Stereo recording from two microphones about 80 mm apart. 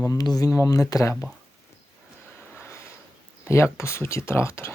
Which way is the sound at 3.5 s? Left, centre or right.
Left.